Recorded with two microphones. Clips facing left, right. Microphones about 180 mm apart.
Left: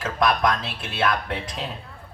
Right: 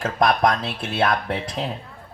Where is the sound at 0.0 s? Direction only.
50° right (ahead or behind).